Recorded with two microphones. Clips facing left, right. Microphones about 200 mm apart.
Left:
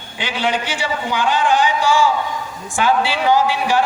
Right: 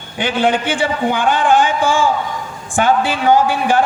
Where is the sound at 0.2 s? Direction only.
50° right (ahead or behind).